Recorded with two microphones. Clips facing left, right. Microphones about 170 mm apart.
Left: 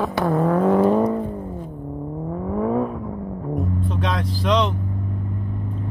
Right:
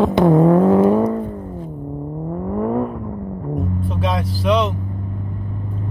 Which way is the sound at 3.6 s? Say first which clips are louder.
Right 2 dB; centre (ahead or behind).